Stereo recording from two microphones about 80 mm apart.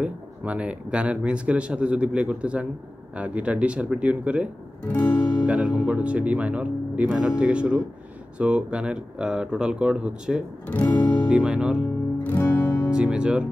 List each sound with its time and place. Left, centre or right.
0.0 s speech: centre
4.8 s guitar: centre
5.5 s speech: centre
10.7 s music: left
11.2 s speech: centre
12.2 s music: left
12.9 s speech: centre